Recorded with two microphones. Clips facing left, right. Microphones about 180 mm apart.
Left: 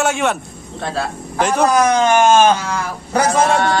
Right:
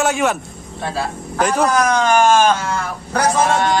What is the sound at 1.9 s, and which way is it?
Speech, 25° left (ahead or behind).